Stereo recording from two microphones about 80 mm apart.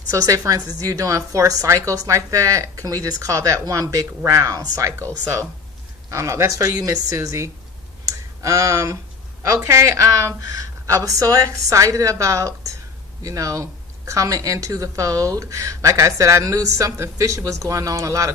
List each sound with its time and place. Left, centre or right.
0.1 s a woman's voice: right
6.1 s a woman's voice: right
6.7 s a woman's voice: right
8.0 s a sound: right
9.6 s a woman's voice: right